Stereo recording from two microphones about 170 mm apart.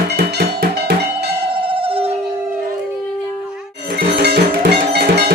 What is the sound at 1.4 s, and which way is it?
Music, 30° right (ahead or behind).